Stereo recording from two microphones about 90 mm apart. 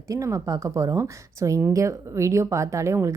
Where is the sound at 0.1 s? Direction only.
35° right (ahead or behind).